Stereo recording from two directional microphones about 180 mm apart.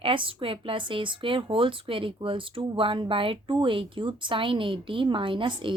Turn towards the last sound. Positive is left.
turn(degrees=-25)  # may be behind; listen again after turning